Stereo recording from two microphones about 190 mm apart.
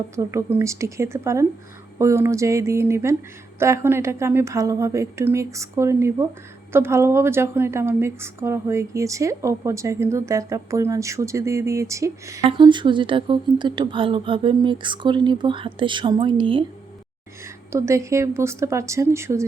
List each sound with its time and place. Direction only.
0.2 s a woman's voice: 15° right (ahead or behind)
17.4 s a woman's voice: 15° right (ahead or behind)